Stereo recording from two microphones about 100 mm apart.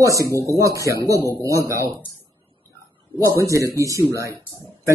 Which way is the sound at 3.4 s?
30° right (ahead or behind).